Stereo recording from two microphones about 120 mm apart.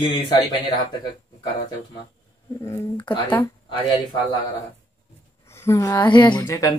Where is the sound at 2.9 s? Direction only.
40° left (ahead or behind).